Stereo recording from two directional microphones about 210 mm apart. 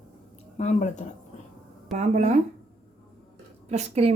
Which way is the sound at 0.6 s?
30° left (ahead or behind).